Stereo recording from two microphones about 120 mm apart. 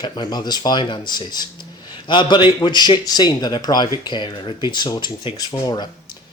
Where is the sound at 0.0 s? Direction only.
35° left (ahead or behind).